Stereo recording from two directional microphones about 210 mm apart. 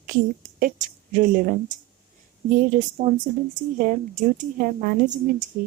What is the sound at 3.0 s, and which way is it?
Speech, 30° right (ahead or behind).